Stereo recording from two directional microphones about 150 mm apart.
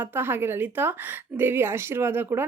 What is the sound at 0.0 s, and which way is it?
A woman's voice, 15° right (ahead or behind).